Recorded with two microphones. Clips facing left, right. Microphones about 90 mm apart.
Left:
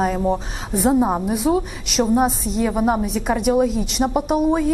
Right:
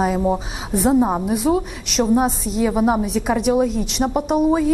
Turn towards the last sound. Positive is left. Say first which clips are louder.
# right 1 dB
turn(degrees=0)  # may be behind; listen again after turning